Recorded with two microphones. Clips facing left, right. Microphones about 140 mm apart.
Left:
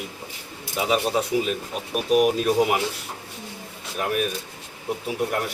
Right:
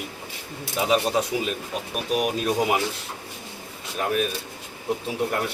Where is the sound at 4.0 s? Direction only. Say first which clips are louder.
Even; 5° left (ahead or behind).